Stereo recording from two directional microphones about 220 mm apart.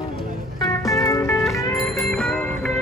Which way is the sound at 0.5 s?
15° left (ahead or behind).